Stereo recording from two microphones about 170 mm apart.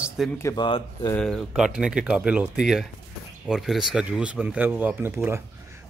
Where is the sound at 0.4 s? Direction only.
15° left (ahead or behind).